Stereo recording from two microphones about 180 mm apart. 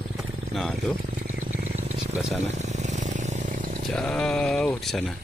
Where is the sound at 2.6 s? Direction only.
40° right (ahead or behind).